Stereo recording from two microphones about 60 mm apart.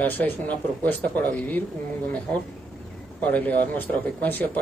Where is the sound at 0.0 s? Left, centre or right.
Left.